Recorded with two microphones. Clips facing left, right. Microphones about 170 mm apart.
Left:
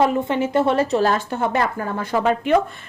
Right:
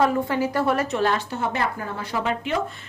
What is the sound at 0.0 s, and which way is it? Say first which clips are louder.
Speech: left 2 dB; 20° left (ahead or behind).